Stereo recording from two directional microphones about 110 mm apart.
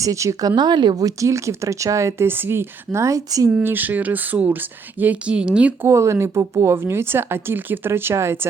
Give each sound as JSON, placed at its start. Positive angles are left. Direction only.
{"t": 0.0, "sound": "speech", "side_deg": -30}
{"t": 0.5, "sound": "speech", "side_deg": -40}
{"t": 3.5, "sound": "speech", "side_deg": -20}
{"t": 5.8, "sound": "speech", "side_deg": -25}